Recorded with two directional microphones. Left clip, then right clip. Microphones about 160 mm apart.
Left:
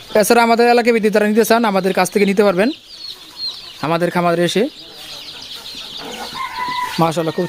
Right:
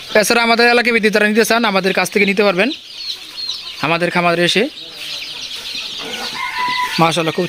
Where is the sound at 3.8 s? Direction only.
15° left (ahead or behind).